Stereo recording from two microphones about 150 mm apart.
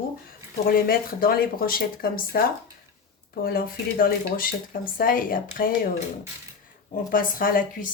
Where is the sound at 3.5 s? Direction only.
75° left (ahead or behind).